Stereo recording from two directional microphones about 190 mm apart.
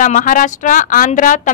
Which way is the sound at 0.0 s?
45° left (ahead or behind).